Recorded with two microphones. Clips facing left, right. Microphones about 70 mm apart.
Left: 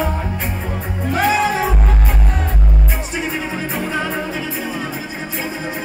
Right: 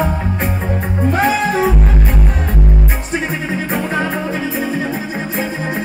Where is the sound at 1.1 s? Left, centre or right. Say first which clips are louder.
Even; right.